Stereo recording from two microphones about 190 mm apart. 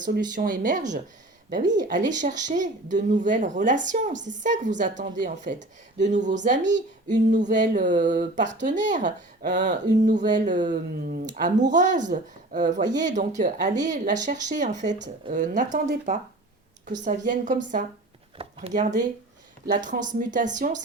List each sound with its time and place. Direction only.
0.3 s speech: 45° right (ahead or behind)